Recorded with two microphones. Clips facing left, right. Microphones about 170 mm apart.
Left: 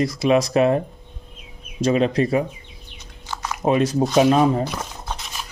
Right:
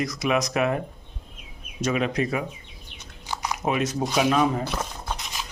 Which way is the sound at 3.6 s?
35° left (ahead or behind).